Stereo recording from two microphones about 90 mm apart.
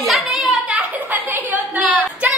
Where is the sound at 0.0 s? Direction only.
Centre (ahead or behind).